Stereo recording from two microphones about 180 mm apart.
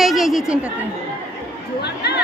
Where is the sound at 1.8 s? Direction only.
65° left (ahead or behind).